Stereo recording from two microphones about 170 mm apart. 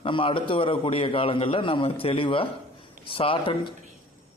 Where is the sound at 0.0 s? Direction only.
30° left (ahead or behind).